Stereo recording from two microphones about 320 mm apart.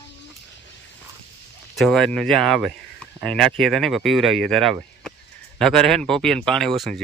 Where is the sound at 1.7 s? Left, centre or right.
Centre.